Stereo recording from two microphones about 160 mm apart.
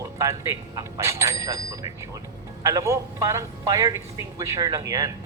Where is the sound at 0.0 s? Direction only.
20° right (ahead or behind).